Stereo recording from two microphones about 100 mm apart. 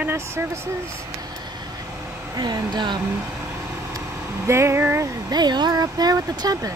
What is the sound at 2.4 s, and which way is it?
Speech, 45° right (ahead or behind).